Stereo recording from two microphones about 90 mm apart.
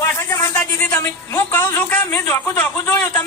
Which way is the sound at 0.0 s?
30° left (ahead or behind).